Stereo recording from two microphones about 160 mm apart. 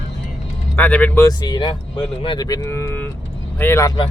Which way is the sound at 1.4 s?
25° left (ahead or behind).